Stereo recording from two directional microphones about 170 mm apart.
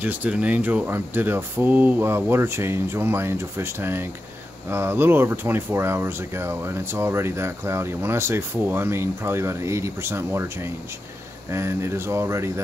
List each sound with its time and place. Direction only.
0.0 s speech: 10° right (ahead or behind)
11.5 s speech: 15° right (ahead or behind)